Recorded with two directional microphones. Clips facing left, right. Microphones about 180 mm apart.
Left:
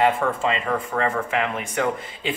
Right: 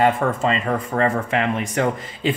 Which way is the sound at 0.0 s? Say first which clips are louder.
Right 2 dB; 40° right (ahead or behind).